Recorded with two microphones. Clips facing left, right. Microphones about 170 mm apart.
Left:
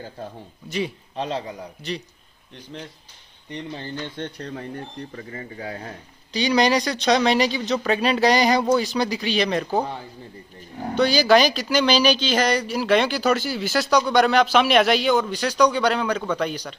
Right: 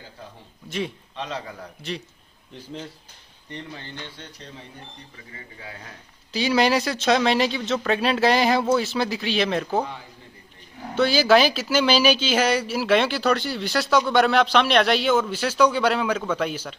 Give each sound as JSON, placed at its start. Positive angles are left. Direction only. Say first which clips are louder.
{"t": 0.7, "sound": "speech", "louder": "left 2 dB", "side_deg": 0}
{"t": 1.1, "sound": "a man's voice", "louder": "left 8 dB", "side_deg": 35}
{"t": 1.4, "sound": "a man's voice", "louder": "left 4 dB", "side_deg": 15}
{"t": 1.8, "sound": "speech", "louder": "left 1 dB", "side_deg": 0}
{"t": 4.2, "sound": "speech", "louder": "left 10 dB", "side_deg": 60}
{"t": 5.3, "sound": "speech", "louder": "left 6 dB", "side_deg": 40}
{"t": 6.3, "sound": "speech", "louder": "left 1 dB", "side_deg": -5}
{"t": 11.0, "sound": "speech", "louder": "left 1 dB", "side_deg": -5}